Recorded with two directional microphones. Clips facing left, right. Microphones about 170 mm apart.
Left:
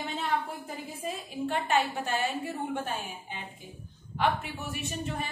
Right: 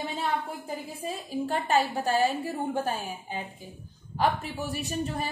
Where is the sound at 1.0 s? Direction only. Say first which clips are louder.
Right 1 dB; 40° right (ahead or behind).